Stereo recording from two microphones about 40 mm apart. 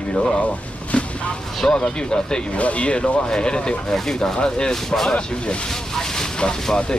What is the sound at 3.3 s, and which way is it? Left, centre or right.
Speech, left.